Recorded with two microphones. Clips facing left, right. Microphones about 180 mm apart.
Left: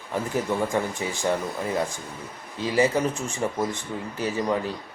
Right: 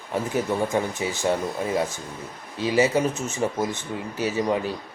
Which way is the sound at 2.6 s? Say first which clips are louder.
Right 1 dB; 25° right (ahead or behind).